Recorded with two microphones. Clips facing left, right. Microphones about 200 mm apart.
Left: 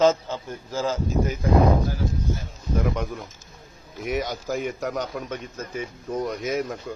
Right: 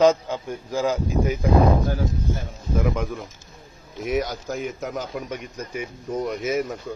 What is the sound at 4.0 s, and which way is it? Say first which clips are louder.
A man's voice: right 2 dB; centre (ahead or behind).